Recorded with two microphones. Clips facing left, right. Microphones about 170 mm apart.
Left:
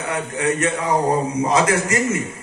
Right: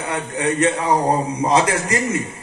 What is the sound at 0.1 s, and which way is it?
Speech, 30° right (ahead or behind).